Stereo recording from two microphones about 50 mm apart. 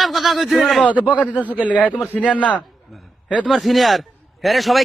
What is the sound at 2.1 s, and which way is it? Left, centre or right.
Speech, left.